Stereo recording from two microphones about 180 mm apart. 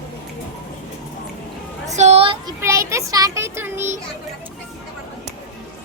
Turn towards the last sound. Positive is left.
turn(degrees=-15)  # may be behind; listen again after turning